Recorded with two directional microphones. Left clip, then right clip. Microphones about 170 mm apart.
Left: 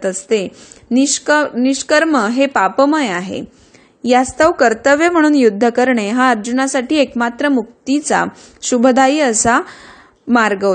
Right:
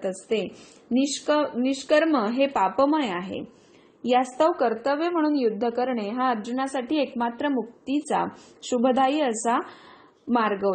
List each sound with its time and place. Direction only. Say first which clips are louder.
0.0 s a woman's voice: left 10 dB; 40° left (ahead or behind)